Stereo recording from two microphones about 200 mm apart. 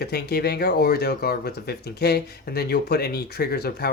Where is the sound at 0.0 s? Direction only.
55° left (ahead or behind).